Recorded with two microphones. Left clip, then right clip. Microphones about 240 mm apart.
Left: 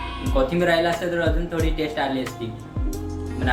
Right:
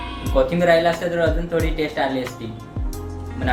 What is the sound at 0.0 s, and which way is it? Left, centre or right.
A woman's voice, centre.